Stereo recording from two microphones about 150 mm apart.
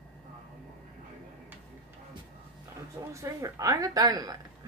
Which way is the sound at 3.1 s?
20° right (ahead or behind).